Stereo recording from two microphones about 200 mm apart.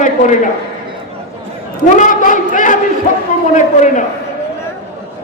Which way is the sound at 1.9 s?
40° left (ahead or behind).